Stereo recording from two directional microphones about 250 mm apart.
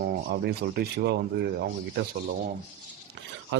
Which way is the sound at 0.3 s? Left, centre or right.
Right.